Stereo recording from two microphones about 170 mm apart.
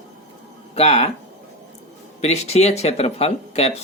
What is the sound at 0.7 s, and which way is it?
Speech, 40° left (ahead or behind).